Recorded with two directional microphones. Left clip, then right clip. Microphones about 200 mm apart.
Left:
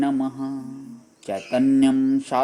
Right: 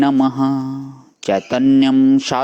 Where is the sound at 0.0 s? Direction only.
30° right (ahead or behind).